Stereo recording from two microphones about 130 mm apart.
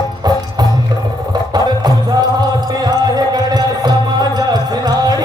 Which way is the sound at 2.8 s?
30° right (ahead or behind).